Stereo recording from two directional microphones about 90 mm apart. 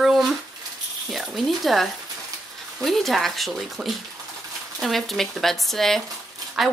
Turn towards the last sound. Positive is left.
turn(degrees=0)  # may be behind; listen again after turning